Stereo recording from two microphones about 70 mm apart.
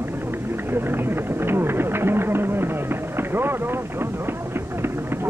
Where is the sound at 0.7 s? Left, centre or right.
Right.